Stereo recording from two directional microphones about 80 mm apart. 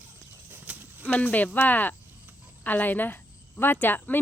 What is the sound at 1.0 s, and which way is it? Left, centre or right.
Speech, left.